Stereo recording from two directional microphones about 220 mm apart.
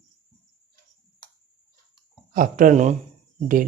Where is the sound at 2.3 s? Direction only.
35° right (ahead or behind).